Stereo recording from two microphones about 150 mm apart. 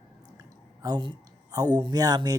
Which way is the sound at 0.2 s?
25° right (ahead or behind).